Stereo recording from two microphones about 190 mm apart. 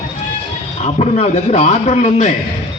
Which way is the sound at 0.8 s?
35° left (ahead or behind).